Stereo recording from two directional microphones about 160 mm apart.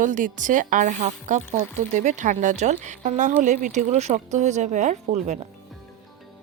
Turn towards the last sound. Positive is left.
turn(degrees=-45)  # may be behind; listen again after turning